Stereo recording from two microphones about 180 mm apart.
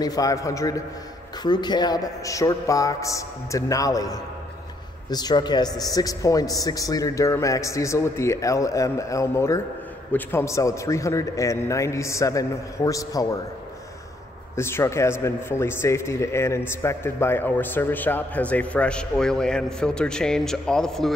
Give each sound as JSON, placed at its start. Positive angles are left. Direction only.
{"t": 0.0, "sound": "a man's voice", "side_deg": 20}
{"t": 14.6, "sound": "a man's voice", "side_deg": 15}